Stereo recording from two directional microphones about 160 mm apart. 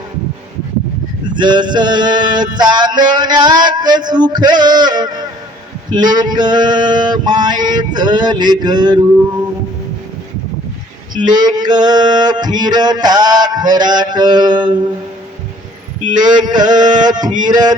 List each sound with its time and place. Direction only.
1.3 s male singing: 30° right (ahead or behind)
11.1 s male singing: 25° right (ahead or behind)
16.0 s male singing: 25° right (ahead or behind)